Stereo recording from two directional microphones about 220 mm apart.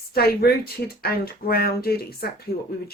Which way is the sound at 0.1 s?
45° left (ahead or behind).